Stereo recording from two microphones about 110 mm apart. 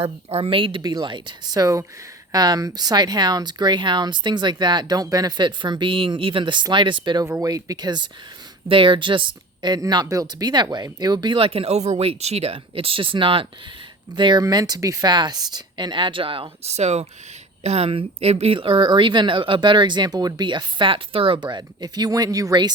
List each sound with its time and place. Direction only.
0.0 s a woman's voice: 65° right (ahead or behind)
0.8 s speech: 40° right (ahead or behind)
7.3 s a woman's voice: 35° right (ahead or behind); by 12.5 s 70° right (ahead or behind)
12.5 s a woman's voice: 55° right (ahead or behind)
14.4 s a woman's voice: 35° right (ahead or behind); by 16.7 s 55° right (ahead or behind)
16.7 s a woman's voice: 80° right; by 22.7 s 35° right (ahead or behind)